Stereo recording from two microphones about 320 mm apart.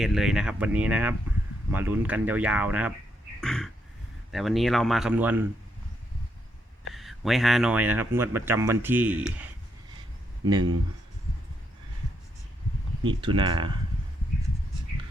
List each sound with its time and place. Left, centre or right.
0.0 s speech: centre
3.4 s a sound: centre
4.3 s speech: centre
6.9 s speech: centre
13.2 s speech: centre